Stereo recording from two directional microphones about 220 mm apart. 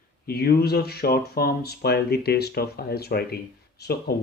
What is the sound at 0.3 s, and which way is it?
Speech, 45° left (ahead or behind).